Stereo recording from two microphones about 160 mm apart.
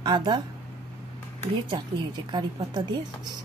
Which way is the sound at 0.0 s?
30° right (ahead or behind).